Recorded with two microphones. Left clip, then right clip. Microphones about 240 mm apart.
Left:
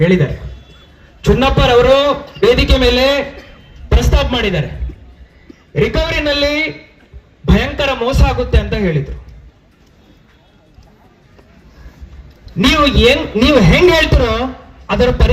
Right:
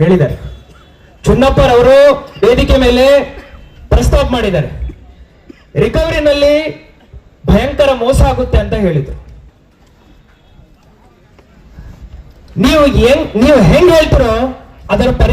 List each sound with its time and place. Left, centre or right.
0.0 s a man's voice: right
5.7 s a man's voice: right
12.5 s a man's voice: right